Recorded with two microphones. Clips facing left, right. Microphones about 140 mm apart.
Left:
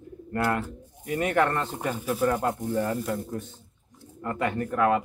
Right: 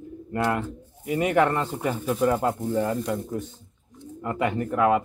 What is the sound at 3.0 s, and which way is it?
Speech, 5° left (ahead or behind).